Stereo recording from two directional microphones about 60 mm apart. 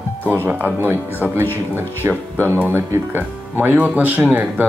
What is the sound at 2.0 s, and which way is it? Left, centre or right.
Speech, right.